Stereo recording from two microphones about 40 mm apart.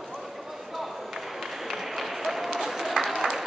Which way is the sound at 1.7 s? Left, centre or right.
Centre.